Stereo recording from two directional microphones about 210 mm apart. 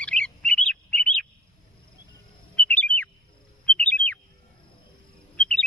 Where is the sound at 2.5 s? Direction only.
5° left (ahead or behind).